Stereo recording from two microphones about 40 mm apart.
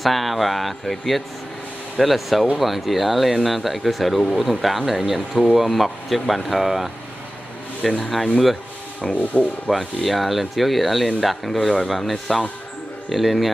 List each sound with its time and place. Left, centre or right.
0.0 s speech: centre
9.1 s rub: left
9.7 s speech: centre